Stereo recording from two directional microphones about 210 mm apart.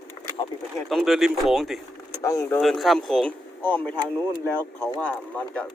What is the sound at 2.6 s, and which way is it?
Speech, centre (ahead or behind).